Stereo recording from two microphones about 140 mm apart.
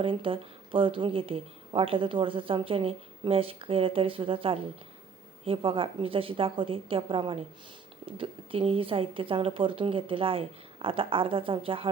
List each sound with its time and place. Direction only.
0.0 s speech: 40° right (ahead or behind)